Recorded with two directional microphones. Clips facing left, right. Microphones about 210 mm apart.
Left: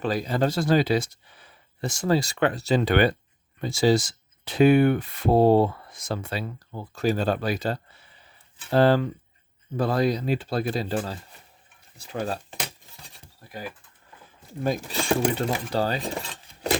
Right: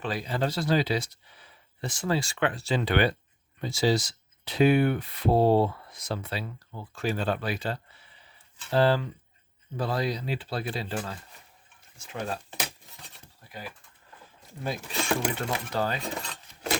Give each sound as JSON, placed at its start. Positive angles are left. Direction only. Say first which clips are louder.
{"t": 0.0, "sound": "speech", "louder": "left 5 dB", "side_deg": 40}
{"t": 14.6, "sound": "speech", "louder": "left 5 dB", "side_deg": 40}